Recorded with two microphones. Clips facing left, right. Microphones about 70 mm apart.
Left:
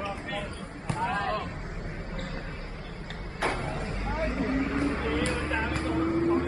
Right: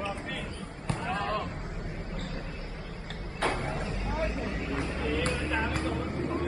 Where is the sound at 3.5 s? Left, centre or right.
Left.